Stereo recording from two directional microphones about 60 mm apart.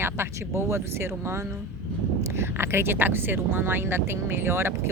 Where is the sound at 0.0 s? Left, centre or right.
Right.